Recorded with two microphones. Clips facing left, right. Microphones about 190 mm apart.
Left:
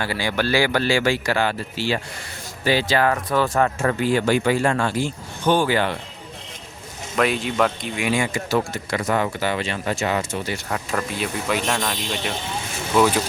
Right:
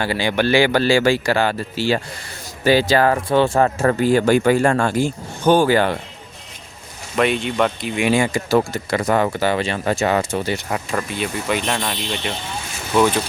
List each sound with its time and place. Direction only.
0.0 s speech: 25° right (ahead or behind); by 6.0 s 45° right (ahead or behind)
7.2 s speech: centre (ahead or behind)
7.9 s speech: 30° right (ahead or behind)
10.7 s speech: centre (ahead or behind)